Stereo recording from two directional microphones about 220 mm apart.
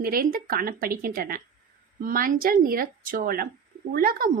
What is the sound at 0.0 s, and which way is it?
A woman's voice, 40° right (ahead or behind).